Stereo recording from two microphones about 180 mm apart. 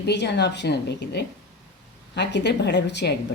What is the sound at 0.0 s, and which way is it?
Speech, 70° left (ahead or behind).